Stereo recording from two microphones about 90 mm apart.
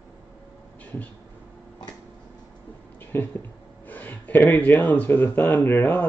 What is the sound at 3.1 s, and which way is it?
Speech, 25° left (ahead or behind).